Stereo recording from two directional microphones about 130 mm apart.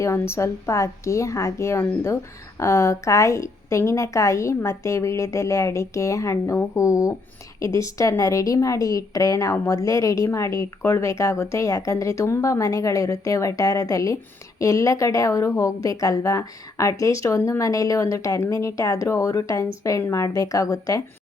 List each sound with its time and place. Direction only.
0.0 s a woman's voice: 20° left (ahead or behind)